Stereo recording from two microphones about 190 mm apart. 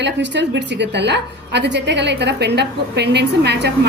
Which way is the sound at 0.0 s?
65° right (ahead or behind).